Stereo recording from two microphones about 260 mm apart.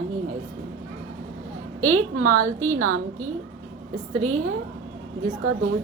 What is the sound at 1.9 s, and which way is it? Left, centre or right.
Speech, right.